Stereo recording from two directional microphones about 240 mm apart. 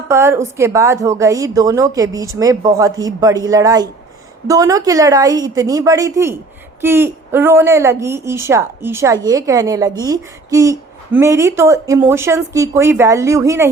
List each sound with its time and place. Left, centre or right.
0.1 s a woman's voice: centre